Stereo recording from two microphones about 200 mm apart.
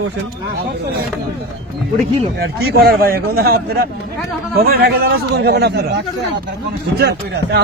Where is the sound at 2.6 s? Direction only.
50° right (ahead or behind).